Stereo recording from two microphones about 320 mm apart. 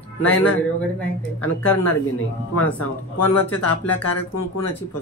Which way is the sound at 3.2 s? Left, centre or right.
Left.